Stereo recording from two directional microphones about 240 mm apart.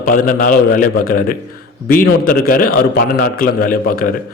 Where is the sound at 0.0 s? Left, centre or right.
Left.